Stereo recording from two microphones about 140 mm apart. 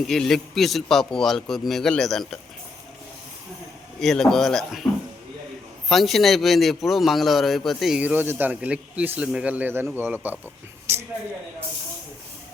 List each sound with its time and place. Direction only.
0.0 s a man's voice: 5° left (ahead or behind)
4.0 s a man's voice: 5° left (ahead or behind)
5.9 s a man's voice: centre (ahead or behind); by 10.3 s 15° right (ahead or behind)
10.9 s a sound: 20° right (ahead or behind)